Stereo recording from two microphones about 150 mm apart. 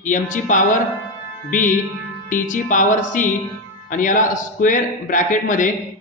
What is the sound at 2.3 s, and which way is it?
A man's voice, 60° left (ahead or behind).